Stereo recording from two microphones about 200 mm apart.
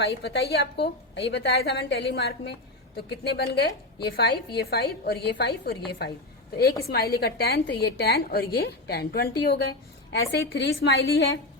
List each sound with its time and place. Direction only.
0.0 s a woman's voice: 60° left (ahead or behind)